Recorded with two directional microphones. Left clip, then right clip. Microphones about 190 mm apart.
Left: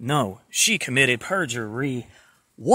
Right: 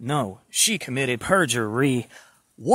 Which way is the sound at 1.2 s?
20° right (ahead or behind).